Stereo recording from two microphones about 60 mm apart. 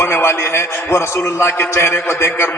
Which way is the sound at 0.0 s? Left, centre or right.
Left.